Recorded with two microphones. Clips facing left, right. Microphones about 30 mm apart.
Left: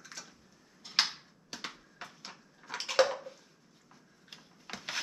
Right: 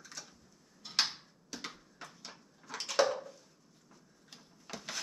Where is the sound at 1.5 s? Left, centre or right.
Left.